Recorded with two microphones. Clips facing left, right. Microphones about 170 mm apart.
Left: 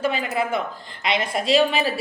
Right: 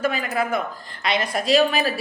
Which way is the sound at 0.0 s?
25° left (ahead or behind).